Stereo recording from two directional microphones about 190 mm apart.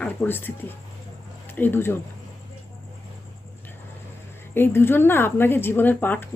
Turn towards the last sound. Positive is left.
turn(degrees=10)  # may be behind; listen again after turning